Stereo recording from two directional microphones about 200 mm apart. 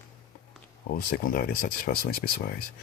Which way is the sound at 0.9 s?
50° left (ahead or behind).